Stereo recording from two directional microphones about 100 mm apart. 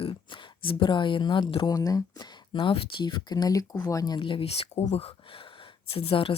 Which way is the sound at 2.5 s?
70° left (ahead or behind).